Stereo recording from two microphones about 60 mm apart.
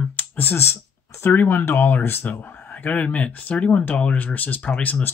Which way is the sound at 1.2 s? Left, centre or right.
Left.